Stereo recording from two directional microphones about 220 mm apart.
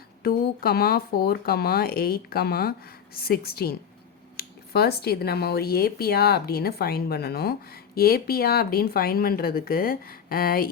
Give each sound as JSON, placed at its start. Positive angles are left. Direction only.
{"t": 0.2, "sound": "speech", "side_deg": 45}